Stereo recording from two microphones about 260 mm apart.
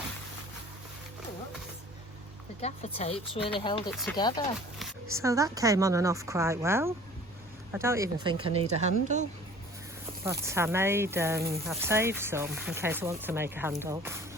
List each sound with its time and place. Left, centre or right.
2.6 s speech: left
3.9 s speech: centre
4.2 s speech: centre
5.1 s a woman's voice: centre
10.2 s speech: centre